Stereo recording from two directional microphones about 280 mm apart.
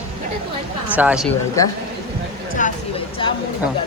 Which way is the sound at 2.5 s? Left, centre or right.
Left.